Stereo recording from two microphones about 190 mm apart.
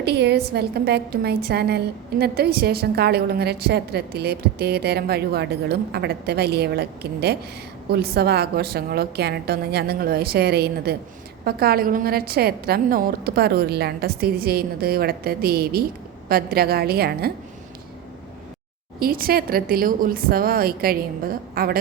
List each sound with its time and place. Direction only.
0.0 s a woman's voice: 60° right (ahead or behind)
18.9 s a woman's voice: 50° right (ahead or behind)